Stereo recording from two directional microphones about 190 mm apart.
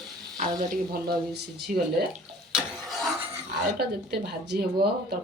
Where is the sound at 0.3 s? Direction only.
50° right (ahead or behind).